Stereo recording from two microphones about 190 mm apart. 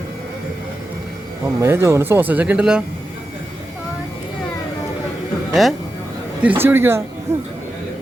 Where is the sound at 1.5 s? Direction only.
15° right (ahead or behind).